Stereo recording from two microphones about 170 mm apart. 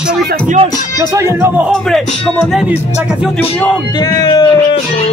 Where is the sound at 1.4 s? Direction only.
10° right (ahead or behind).